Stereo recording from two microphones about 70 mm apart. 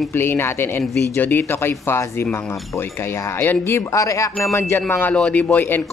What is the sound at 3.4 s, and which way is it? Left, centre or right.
Speech, left.